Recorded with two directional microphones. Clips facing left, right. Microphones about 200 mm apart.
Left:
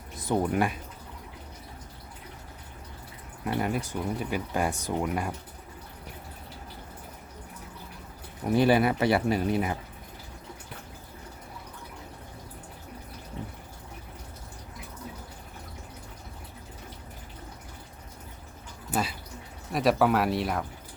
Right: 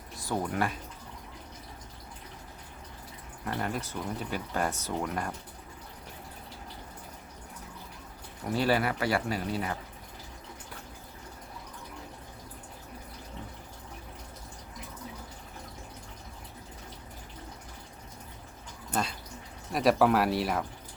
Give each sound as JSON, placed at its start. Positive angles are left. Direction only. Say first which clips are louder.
{"t": 0.2, "sound": "speech", "louder": "left 5 dB", "side_deg": 20}
{"t": 3.4, "sound": "speech", "louder": "left 5 dB", "side_deg": 15}
{"t": 8.4, "sound": "speech", "louder": "left 5 dB", "side_deg": 20}
{"t": 18.9, "sound": "a sound", "louder": "left 2 dB", "side_deg": 5}
{"t": 19.7, "sound": "speech", "louder": "even", "side_deg": 0}